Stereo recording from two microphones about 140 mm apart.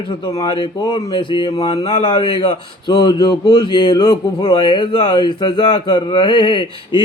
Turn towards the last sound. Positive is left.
turn(degrees=35)  # may be behind; listen again after turning